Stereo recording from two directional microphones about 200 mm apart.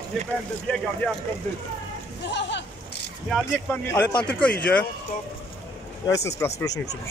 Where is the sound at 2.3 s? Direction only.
60° left (ahead or behind).